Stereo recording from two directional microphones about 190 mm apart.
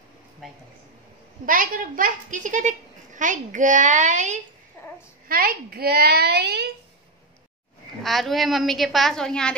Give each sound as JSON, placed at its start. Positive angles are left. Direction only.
{"t": 0.4, "sound": "a woman's voice", "side_deg": 0}
{"t": 1.4, "sound": "a woman's voice", "side_deg": -45}
{"t": 4.8, "sound": "a sound", "side_deg": 15}
{"t": 5.3, "sound": "a woman's voice", "side_deg": -50}
{"t": 8.0, "sound": "a woman's voice", "side_deg": 0}